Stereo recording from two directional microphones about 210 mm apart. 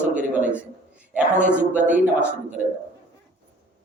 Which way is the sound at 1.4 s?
5° right (ahead or behind).